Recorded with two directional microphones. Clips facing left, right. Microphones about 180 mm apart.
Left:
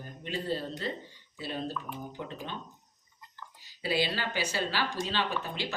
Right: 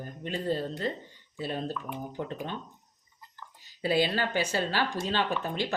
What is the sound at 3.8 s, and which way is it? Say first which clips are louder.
Speech: right 4 dB; 50° right (ahead or behind).